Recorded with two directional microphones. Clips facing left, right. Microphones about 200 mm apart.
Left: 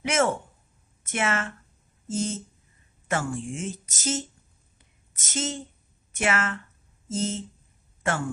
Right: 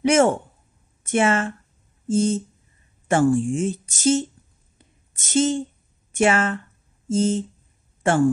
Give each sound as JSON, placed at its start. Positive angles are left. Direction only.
{"t": 0.0, "sound": "speech", "side_deg": -30}
{"t": 4.7, "sound": "a sound", "side_deg": -30}
{"t": 6.1, "sound": "speech", "side_deg": -30}